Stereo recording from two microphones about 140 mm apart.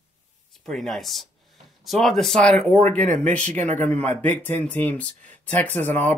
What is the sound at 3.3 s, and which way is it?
Speech, 10° left (ahead or behind).